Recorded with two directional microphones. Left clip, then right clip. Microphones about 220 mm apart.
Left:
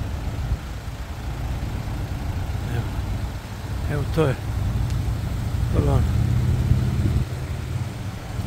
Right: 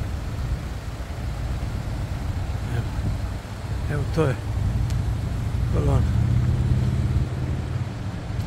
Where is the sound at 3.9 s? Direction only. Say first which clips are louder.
Left 2 dB; 10° left (ahead or behind).